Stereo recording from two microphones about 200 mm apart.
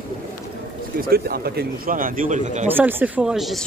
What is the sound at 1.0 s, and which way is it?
Speech, 50° right (ahead or behind).